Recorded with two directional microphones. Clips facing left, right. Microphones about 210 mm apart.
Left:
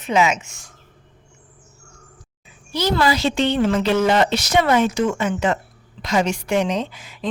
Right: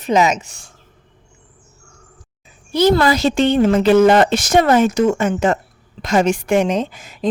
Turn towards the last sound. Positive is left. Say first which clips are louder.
# right 4 dB
turn(degrees=-45)  # may be behind; listen again after turning